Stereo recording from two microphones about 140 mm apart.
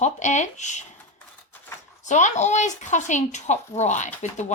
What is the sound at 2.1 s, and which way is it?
Speech, 60° left (ahead or behind).